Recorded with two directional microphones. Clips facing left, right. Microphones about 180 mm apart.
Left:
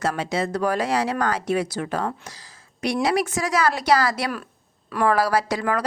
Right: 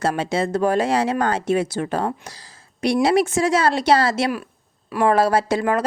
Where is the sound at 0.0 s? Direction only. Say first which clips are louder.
Right 3 dB; 30° right (ahead or behind).